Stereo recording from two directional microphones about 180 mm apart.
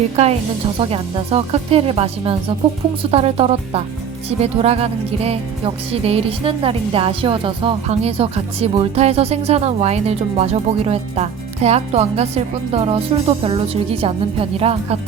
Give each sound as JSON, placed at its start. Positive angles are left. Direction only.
{"t": 0.8, "sound": "speech", "side_deg": -30}